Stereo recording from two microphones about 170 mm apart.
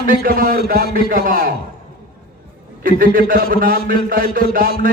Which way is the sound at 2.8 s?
60° right (ahead or behind).